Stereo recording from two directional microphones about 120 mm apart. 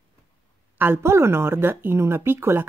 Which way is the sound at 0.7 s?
20° right (ahead or behind).